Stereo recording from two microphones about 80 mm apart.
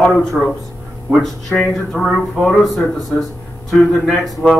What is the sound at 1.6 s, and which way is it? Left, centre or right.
A man's voice, centre.